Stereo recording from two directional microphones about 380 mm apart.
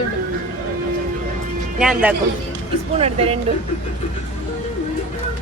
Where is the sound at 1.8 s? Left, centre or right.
Centre.